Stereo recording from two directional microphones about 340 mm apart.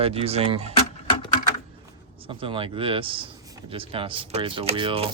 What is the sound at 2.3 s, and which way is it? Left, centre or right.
Speech, centre.